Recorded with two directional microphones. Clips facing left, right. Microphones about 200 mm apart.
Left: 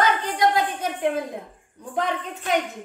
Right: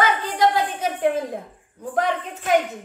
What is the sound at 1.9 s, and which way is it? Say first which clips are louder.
Speech: right 3 dB; centre (ahead or behind).